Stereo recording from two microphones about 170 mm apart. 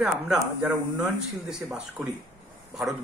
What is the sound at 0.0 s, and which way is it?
A man's voice, 5° right (ahead or behind).